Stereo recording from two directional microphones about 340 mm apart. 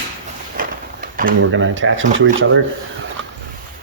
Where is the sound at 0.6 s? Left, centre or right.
Right.